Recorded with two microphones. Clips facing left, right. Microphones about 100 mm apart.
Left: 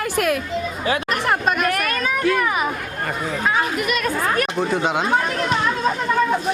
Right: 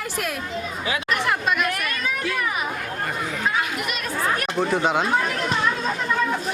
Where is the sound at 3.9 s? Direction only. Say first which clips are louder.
Left 3 dB; 50° left (ahead or behind).